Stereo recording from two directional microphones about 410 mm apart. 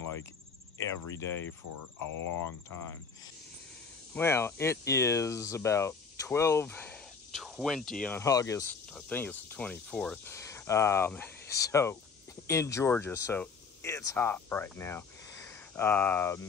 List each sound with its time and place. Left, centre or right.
1.6 s cricket: left
4.1 s speech: centre